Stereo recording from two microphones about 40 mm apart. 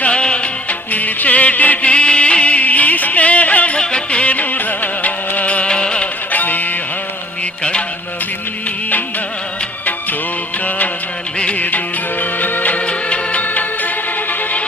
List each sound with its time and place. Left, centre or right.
0.0 s music: left
0.9 s music: left
3.8 s music: left
6.3 s music: left
7.6 s music: left
10.6 s music: left
12.8 s music: left
13.4 s music: left